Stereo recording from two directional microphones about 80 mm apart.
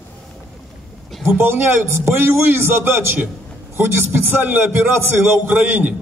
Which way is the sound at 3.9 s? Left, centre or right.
Right.